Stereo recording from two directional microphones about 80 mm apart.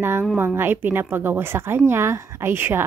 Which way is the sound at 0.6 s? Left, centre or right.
Right.